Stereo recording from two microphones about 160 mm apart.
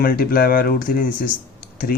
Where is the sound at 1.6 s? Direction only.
65° left (ahead or behind).